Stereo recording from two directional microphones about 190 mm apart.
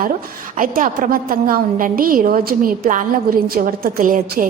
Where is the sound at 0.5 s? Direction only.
45° right (ahead or behind).